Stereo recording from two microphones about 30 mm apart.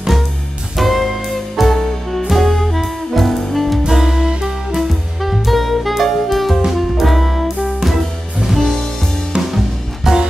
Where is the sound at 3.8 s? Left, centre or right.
Centre.